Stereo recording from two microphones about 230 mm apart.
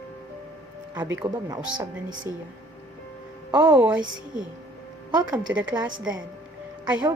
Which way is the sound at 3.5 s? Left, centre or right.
Centre.